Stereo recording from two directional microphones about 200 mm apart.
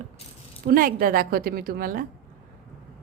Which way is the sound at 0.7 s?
45° right (ahead or behind).